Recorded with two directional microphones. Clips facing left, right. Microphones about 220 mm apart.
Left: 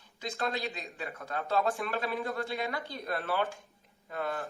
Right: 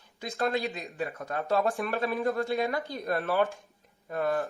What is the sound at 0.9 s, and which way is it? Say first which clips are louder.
Speech: right 5 dB; 45° right (ahead or behind).